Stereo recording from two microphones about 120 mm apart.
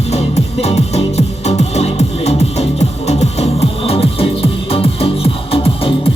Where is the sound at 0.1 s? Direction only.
60° left (ahead or behind).